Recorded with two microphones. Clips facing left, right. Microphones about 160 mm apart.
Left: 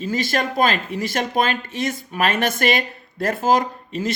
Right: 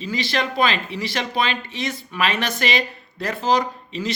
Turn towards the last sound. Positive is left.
turn(degrees=50)  # may be behind; listen again after turning